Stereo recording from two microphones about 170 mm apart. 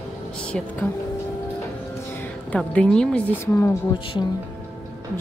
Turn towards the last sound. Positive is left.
turn(degrees=25)  # may be behind; listen again after turning